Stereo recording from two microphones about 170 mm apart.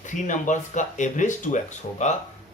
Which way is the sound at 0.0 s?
45° left (ahead or behind).